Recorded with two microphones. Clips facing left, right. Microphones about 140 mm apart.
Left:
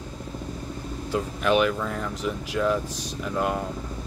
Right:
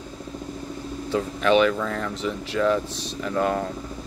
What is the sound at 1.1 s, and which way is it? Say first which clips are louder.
Speech: right 3 dB; 5° left (ahead or behind).